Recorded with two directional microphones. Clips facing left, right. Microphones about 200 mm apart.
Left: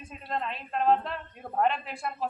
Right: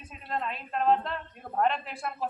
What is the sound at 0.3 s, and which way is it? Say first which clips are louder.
A man's voice: even; centre (ahead or behind).